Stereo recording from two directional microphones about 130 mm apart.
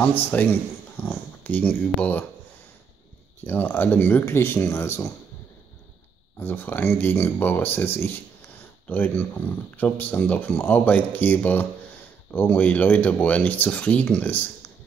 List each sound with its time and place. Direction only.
0.0 s speech: 10° left (ahead or behind)
3.4 s speech: 15° left (ahead or behind)
6.4 s speech: 15° left (ahead or behind)